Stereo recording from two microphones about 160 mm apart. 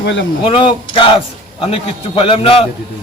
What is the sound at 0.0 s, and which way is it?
Speech, 90° left.